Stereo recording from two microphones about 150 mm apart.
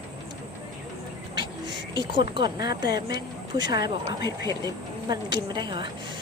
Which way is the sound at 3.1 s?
30° right (ahead or behind).